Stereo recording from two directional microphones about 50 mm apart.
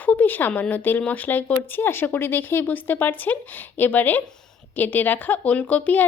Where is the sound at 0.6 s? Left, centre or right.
Left.